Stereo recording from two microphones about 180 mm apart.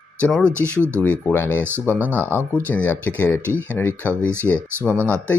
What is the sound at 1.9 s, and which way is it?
Speech, 10° right (ahead or behind).